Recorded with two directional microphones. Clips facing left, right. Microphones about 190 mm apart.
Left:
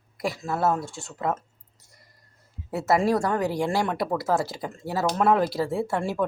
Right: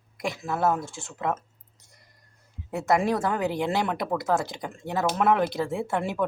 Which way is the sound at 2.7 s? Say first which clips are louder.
Left 2 dB; 5° left (ahead or behind).